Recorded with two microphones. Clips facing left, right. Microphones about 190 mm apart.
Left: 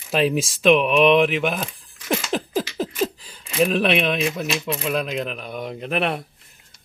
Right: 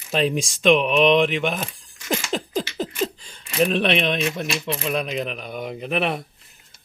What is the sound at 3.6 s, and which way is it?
Speech, 5° left (ahead or behind).